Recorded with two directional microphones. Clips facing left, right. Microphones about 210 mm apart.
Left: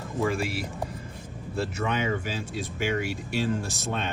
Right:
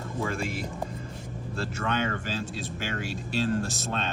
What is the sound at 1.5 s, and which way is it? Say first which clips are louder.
Speech: left 2 dB; 5° left (ahead or behind).